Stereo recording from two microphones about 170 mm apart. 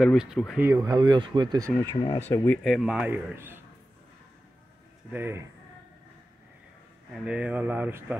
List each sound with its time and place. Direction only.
0.0 s speech: 5° right (ahead or behind)
0.7 s speech: 20° right (ahead or behind)
1.8 s speech: 25° left (ahead or behind)
2.3 s speech: 10° left (ahead or behind)
2.6 s a man's voice: centre (ahead or behind)
5.1 s a man's voice: 15° right (ahead or behind)
7.2 s a man's voice: 5° right (ahead or behind)